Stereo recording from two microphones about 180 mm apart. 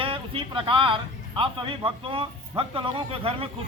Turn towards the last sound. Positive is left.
turn(degrees=-30)  # may be behind; listen again after turning